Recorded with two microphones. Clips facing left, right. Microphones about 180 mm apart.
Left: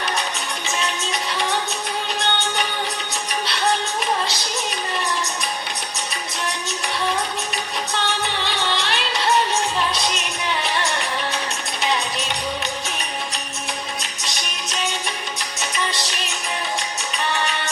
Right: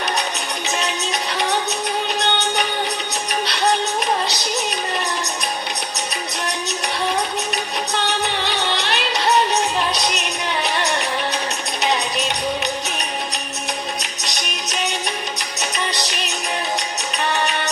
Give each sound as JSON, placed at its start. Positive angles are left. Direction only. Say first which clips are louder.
{"t": 2.1, "sound": "music", "louder": "right 1 dB", "side_deg": -20}
{"t": 8.5, "sound": "music", "louder": "right 2 dB", "side_deg": -20}
{"t": 14.0, "sound": "music", "louder": "right 2 dB", "side_deg": -20}